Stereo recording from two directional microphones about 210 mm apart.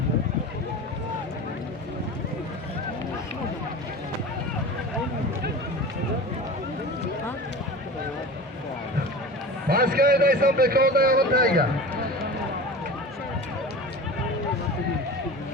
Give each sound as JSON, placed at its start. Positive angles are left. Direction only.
{"t": 9.6, "sound": "a man's voice", "side_deg": -45}